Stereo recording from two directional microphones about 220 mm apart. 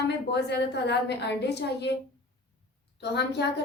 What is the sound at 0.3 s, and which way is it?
A woman's voice, 50° left (ahead or behind).